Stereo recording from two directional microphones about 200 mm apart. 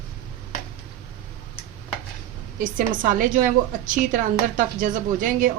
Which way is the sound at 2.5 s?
45° right (ahead or behind).